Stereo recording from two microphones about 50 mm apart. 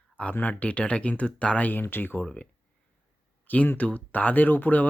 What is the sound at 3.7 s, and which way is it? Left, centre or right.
Speech, left.